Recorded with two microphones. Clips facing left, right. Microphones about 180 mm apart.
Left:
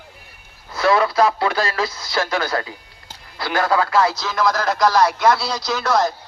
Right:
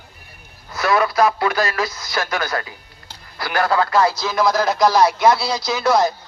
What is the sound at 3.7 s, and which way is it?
A man's voice, 5° left (ahead or behind).